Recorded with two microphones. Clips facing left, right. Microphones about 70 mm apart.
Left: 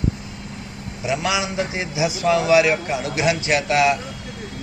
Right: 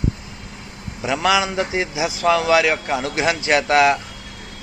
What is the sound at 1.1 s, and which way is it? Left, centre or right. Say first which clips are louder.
Speech: right 4 dB; right.